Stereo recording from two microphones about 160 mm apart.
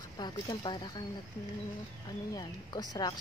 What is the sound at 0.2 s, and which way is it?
Speech, 25° left (ahead or behind).